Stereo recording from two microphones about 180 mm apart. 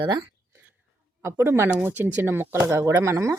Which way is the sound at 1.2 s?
15° right (ahead or behind).